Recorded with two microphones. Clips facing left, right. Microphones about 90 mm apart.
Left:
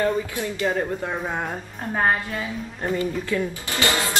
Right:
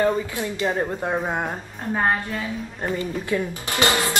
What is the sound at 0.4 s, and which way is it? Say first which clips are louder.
Speech: even; 20° right (ahead or behind).